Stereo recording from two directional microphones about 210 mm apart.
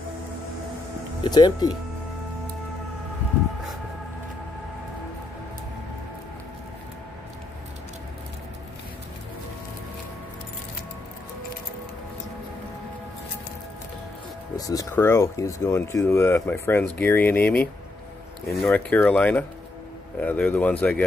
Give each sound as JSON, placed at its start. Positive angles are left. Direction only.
{"t": 1.2, "sound": "speech", "side_deg": 20}
{"t": 14.6, "sound": "speech", "side_deg": 15}